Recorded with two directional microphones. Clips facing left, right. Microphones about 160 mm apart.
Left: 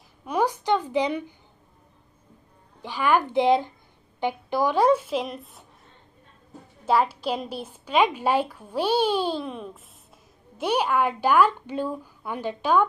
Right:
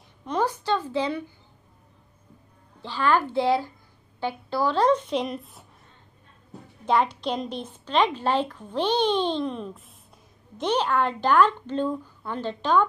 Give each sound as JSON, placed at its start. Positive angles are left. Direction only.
{"t": 0.2, "sound": "a woman's voice", "side_deg": 10}
{"t": 2.8, "sound": "a woman's voice", "side_deg": 15}
{"t": 6.9, "sound": "a woman's voice", "side_deg": 5}